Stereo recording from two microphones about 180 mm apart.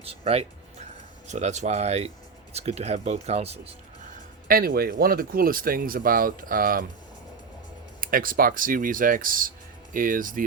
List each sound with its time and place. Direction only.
0.0 s speech: 35° right (ahead or behind)
4.4 s speech: 55° right (ahead or behind)
8.0 s speech: 50° right (ahead or behind)